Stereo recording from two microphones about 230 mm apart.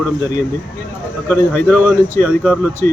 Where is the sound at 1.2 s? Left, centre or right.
Centre.